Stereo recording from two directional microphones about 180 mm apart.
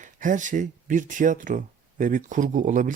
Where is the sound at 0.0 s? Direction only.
45° right (ahead or behind).